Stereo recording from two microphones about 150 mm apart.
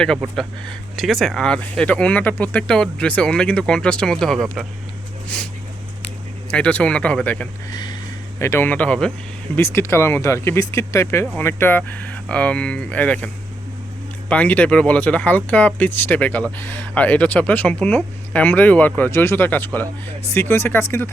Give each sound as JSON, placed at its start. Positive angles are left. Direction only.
{"t": 0.9, "sound": "speech", "side_deg": 0}
{"t": 6.5, "sound": "speech", "side_deg": 10}
{"t": 9.6, "sound": "speech", "side_deg": 15}